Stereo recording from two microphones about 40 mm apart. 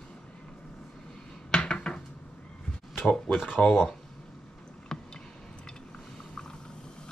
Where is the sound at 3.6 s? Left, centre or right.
Left.